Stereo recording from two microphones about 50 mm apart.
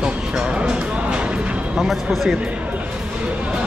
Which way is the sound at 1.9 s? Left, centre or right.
Centre.